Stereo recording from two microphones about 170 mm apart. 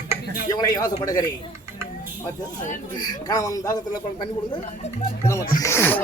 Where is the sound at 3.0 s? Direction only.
20° left (ahead or behind).